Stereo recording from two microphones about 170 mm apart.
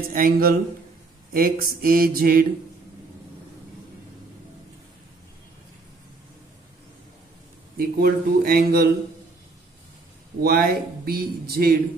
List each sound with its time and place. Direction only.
0.1 s speech: 60° right (ahead or behind)
7.7 s speech: 60° right (ahead or behind)
10.4 s speech: 60° right (ahead or behind)